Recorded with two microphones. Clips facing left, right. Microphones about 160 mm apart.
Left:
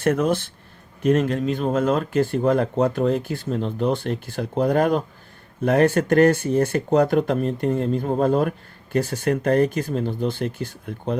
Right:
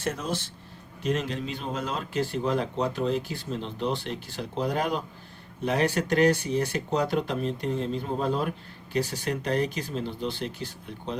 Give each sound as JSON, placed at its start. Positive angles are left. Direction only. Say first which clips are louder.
{"t": 0.0, "sound": "speech", "louder": "left 10 dB", "side_deg": 55}